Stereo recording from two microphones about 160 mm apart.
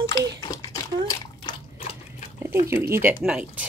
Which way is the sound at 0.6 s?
25° left (ahead or behind).